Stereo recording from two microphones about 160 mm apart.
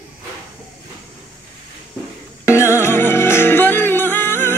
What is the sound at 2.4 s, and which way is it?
Music, 15° left (ahead or behind).